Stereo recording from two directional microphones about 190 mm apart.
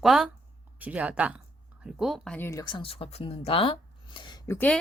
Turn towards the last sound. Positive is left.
turn(degrees=20)  # may be behind; listen again after turning